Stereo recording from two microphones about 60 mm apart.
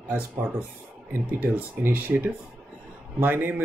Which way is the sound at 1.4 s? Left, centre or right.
Right.